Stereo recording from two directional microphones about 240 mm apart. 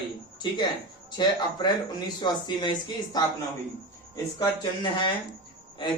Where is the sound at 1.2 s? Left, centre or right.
Centre.